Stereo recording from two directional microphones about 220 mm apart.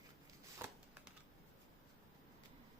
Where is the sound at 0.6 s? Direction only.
10° right (ahead or behind).